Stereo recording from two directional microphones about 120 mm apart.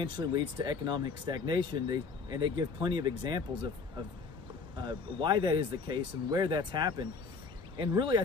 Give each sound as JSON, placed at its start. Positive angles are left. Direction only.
{"t": 0.0, "sound": "speech", "side_deg": -40}
{"t": 4.7, "sound": "speech", "side_deg": -40}